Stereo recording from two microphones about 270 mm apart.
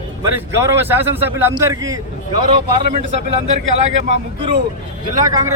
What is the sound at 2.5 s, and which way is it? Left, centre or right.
Speech, right.